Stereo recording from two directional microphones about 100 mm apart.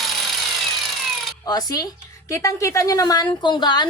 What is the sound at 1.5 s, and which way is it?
A woman's voice, 40° left (ahead or behind).